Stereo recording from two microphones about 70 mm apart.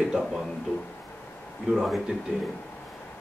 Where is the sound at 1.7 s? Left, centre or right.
Centre.